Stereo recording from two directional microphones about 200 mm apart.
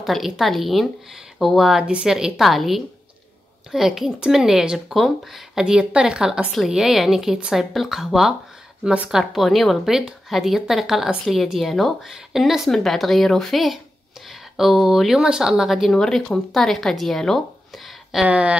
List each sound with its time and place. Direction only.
0.0 s speech: centre (ahead or behind)